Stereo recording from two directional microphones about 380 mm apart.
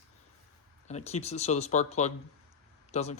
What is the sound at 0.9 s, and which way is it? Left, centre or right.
Speech, centre.